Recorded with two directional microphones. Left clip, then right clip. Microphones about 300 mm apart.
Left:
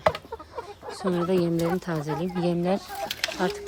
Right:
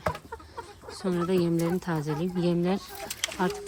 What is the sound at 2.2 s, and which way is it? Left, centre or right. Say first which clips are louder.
Speech: left 2 dB; left.